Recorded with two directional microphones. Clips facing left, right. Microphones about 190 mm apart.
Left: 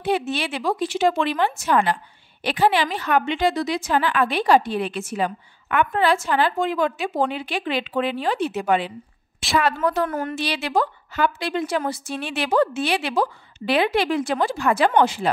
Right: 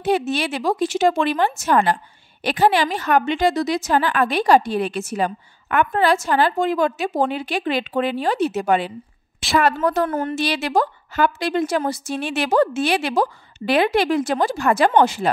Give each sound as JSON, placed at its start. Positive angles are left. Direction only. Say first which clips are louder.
{"t": 0.0, "sound": "a woman's voice", "louder": "right 3 dB", "side_deg": -45}
{"t": 9.4, "sound": "a sound", "louder": "right 2 dB", "side_deg": 0}
{"t": 10.0, "sound": "a woman's voice", "louder": "right 3 dB", "side_deg": -30}
{"t": 10.3, "sound": "a woman's voice", "louder": "right 3 dB", "side_deg": -45}